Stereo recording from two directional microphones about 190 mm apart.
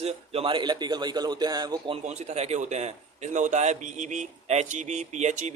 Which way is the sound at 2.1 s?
35° right (ahead or behind).